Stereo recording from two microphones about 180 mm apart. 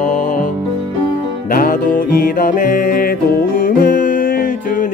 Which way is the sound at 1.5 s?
50° left (ahead or behind).